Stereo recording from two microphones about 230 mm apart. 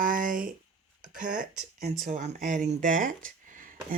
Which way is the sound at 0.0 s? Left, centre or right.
Right.